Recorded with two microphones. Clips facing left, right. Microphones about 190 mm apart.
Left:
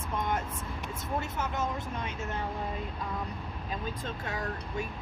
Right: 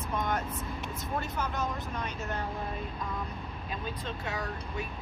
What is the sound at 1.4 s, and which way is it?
Speech, 25° left (ahead or behind).